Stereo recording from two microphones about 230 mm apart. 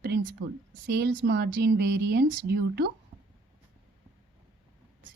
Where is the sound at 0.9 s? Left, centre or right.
Right.